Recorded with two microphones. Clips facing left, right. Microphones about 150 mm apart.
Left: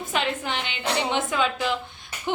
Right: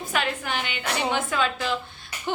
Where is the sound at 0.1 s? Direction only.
20° left (ahead or behind).